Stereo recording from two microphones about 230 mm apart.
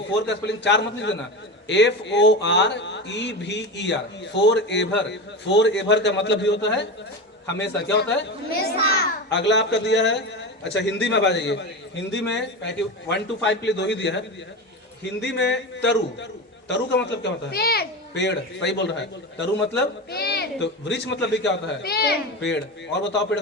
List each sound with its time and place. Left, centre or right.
0.2 s a man's voice: left